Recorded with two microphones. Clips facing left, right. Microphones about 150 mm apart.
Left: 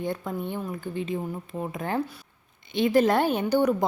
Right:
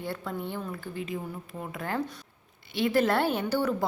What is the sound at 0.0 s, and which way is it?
A woman's voice, 20° left (ahead or behind).